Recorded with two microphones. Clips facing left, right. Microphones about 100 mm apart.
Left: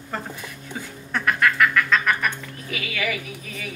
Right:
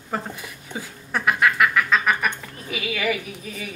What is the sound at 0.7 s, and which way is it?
Duck, 10° right (ahead or behind).